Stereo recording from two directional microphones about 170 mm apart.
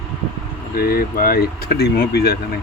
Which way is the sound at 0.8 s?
60° left (ahead or behind).